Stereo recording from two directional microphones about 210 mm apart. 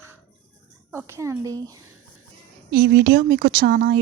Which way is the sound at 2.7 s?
45° right (ahead or behind).